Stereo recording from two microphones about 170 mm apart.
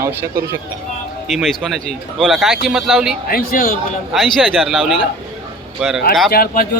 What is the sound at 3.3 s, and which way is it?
Speech, 55° left (ahead or behind).